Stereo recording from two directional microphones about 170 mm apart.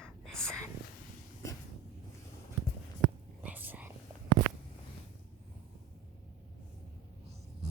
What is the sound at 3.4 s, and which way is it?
Whispering, 10° right (ahead or behind).